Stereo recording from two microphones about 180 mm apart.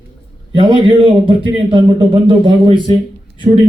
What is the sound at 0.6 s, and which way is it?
Speech, 30° right (ahead or behind).